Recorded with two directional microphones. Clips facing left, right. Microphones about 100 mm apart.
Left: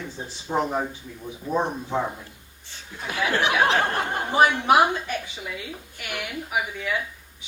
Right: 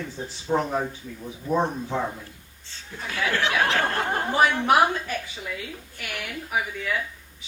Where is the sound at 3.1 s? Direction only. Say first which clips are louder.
Left 2 dB; 15° left (ahead or behind).